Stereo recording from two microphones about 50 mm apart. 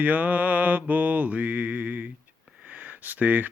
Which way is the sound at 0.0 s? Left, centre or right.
Right.